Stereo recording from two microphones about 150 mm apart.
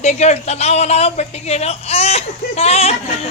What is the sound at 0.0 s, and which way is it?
A woman's voice, 50° left (ahead or behind).